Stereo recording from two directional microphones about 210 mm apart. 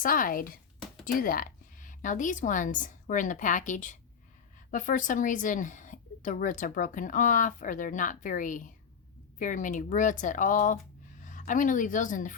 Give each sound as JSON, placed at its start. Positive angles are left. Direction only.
{"t": 0.0, "sound": "a woman's voice", "side_deg": 40}